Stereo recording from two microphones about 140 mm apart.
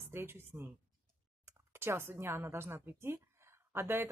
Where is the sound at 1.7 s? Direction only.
15° right (ahead or behind).